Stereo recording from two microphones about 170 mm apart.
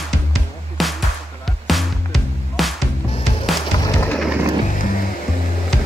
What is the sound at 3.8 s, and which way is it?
Bird, 25° left (ahead or behind).